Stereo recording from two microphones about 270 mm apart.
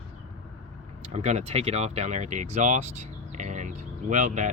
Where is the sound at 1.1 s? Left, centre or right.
Right.